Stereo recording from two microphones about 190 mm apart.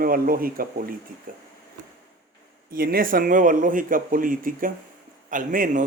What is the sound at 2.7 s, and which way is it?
Speech, 50° right (ahead or behind).